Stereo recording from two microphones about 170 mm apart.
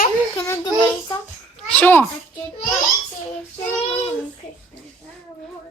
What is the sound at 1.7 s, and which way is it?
Speech, 10° left (ahead or behind).